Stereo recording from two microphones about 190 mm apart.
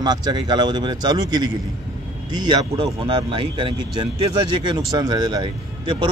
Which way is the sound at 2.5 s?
25° right (ahead or behind).